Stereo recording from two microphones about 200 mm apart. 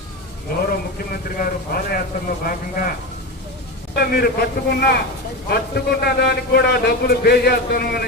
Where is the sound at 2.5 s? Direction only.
45° left (ahead or behind).